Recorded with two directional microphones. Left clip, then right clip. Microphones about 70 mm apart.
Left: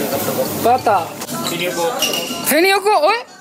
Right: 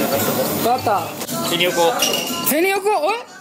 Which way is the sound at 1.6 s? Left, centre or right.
Centre.